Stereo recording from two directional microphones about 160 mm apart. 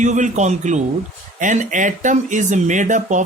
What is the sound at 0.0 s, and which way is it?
Speech, 50° right (ahead or behind).